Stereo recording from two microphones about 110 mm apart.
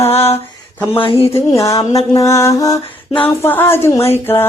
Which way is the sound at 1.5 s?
30° left (ahead or behind).